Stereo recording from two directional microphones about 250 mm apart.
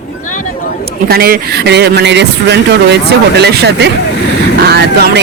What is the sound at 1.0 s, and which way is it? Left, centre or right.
Speech, right.